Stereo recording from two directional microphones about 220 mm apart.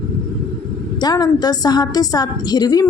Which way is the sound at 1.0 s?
20° left (ahead or behind).